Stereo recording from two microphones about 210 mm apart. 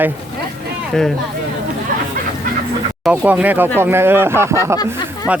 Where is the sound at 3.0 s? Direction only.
5° right (ahead or behind).